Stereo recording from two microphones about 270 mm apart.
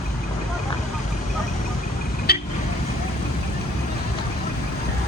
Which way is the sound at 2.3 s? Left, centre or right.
Left.